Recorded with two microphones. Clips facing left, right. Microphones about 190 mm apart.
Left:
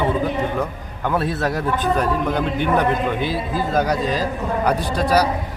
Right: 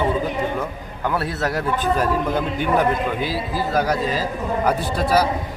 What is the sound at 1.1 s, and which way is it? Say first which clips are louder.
Speech: left 3 dB; 20° left (ahead or behind).